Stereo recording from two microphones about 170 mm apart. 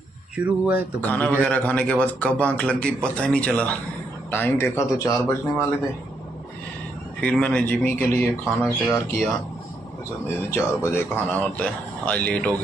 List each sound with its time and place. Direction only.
0.4 s speech: 10° right (ahead or behind)
1.0 s a man's voice: 10° left (ahead or behind)
7.2 s a man's voice: 5° left (ahead or behind)
10.5 s a man's voice: 15° left (ahead or behind)